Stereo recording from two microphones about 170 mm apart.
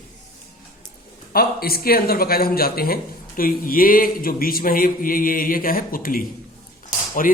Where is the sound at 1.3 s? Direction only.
60° left (ahead or behind).